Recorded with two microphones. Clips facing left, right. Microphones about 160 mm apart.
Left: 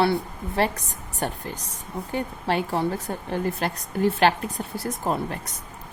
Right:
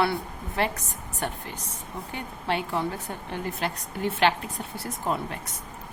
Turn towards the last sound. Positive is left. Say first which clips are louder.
# left 3 dB
turn(degrees=40)  # may be behind; listen again after turning